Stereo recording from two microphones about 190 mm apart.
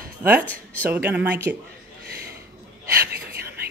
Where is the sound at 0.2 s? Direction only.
10° right (ahead or behind).